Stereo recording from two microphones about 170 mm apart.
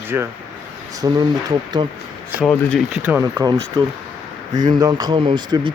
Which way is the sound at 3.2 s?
20° right (ahead or behind).